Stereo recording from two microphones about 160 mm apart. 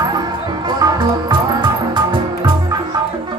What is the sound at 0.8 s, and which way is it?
Music, 25° right (ahead or behind).